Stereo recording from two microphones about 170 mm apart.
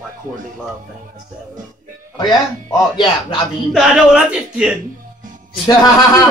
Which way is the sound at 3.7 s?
5° right (ahead or behind).